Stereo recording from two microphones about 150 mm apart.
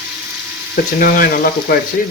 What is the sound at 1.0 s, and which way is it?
Frying, 80° left.